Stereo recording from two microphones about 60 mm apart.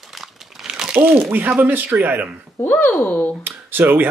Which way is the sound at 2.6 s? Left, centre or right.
Left.